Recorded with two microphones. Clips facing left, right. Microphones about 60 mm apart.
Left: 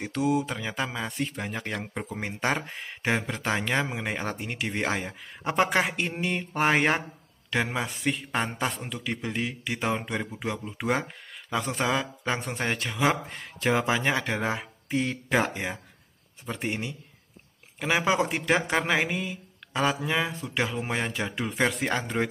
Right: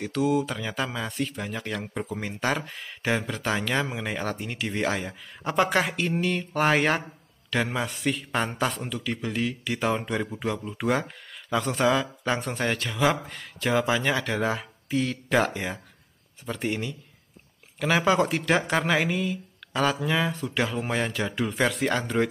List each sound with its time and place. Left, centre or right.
0.0 s speech: left
1.2 s speech: left
9.9 s speech: centre
11.6 s speech: left
13.3 s speech: left; by 18.9 s centre
18.9 s mantra: left
20.2 s speech: centre
21.5 s speech: left